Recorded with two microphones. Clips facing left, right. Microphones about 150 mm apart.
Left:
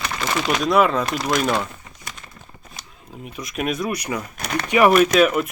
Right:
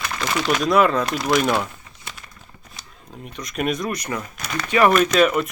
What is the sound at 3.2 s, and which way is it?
Speech, 5° left (ahead or behind).